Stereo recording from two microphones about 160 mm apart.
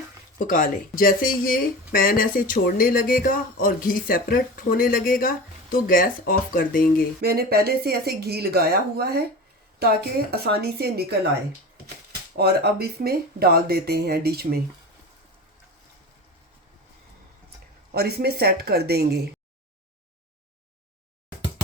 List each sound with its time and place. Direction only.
0.3 s speech: 60° left (ahead or behind)
7.2 s speech: 75° right (ahead or behind)
12.4 s speech: 80° right
17.9 s speech: 80° right